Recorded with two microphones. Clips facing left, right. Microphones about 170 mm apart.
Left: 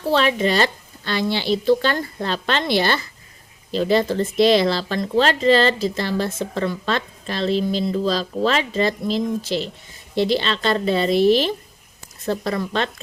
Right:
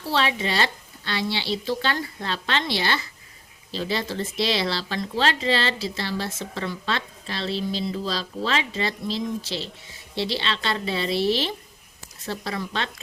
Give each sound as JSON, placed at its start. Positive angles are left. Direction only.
{"t": 0.0, "sound": "speech", "side_deg": 50}